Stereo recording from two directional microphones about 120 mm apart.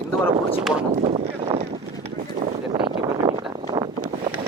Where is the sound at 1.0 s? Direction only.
55° right (ahead or behind).